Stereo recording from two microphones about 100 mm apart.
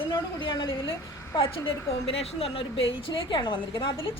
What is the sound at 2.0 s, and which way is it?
A woman's voice, 75° left (ahead or behind).